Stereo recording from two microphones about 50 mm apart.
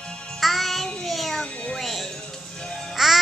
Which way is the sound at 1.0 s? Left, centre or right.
Centre.